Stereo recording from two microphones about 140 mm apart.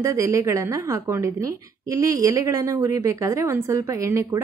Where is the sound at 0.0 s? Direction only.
20° right (ahead or behind).